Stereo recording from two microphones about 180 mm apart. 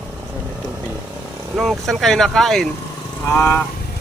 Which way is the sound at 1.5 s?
Centre (ahead or behind).